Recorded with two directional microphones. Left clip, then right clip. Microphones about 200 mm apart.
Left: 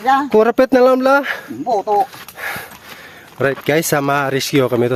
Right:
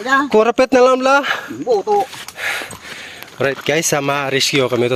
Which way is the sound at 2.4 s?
20° left (ahead or behind).